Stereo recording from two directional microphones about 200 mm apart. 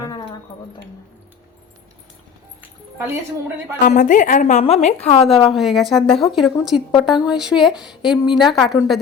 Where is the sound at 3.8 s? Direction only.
40° left (ahead or behind).